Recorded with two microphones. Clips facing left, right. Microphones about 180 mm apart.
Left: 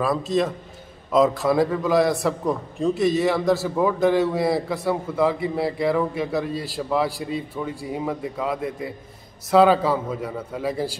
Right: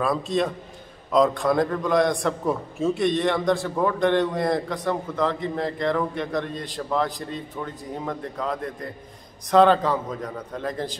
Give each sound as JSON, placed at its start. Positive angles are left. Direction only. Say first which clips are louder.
{"t": 0.0, "sound": "a man's voice", "louder": "left 2 dB", "side_deg": 0}